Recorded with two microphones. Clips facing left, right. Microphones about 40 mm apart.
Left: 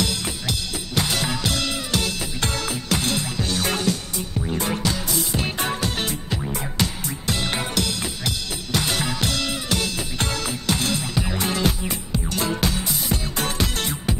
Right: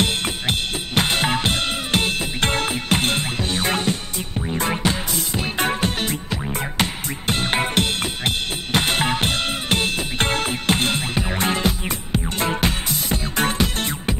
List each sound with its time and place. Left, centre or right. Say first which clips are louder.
0.0 s drum kit: right 4 dB; right
4.6 s music: right 4 dB; right